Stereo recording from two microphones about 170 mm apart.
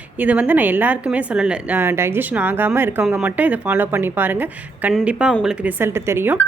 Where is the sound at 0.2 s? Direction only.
10° right (ahead or behind).